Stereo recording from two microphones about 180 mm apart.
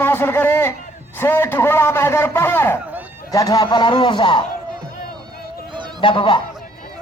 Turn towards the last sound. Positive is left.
turn(degrees=30)  # may be behind; listen again after turning